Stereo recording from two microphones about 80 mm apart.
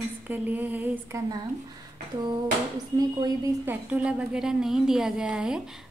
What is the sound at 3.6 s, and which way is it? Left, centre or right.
A woman's voice, right.